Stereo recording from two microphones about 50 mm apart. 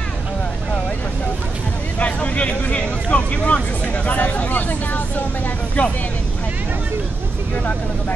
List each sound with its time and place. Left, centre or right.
2.0 s speech: left